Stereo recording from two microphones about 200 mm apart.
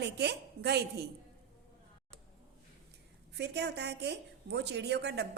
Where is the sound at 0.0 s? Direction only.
55° right (ahead or behind).